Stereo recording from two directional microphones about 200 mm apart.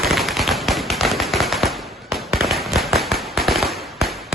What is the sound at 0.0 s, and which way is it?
Tap, centre (ahead or behind).